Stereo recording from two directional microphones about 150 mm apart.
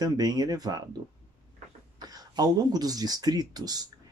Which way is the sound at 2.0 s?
25° right (ahead or behind).